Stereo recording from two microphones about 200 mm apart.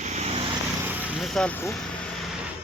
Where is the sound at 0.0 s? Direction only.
35° right (ahead or behind).